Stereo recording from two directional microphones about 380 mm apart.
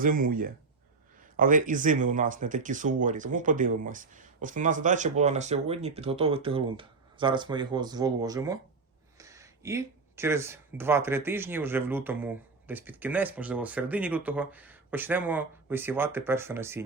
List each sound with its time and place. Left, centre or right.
0.0 s speech: right; by 16.8 s centre